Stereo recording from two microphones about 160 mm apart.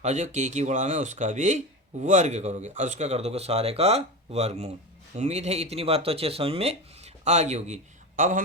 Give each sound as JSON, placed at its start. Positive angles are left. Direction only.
{"t": 0.0, "sound": "speech", "side_deg": -50}